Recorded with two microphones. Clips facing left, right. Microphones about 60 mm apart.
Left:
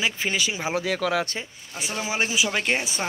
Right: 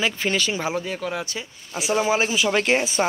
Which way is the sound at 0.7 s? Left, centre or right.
Left.